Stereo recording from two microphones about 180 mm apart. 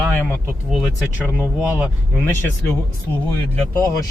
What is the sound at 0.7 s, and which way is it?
Speech, centre (ahead or behind).